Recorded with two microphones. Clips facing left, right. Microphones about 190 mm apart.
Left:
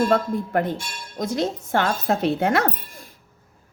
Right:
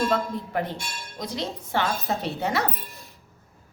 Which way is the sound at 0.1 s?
50° left (ahead or behind).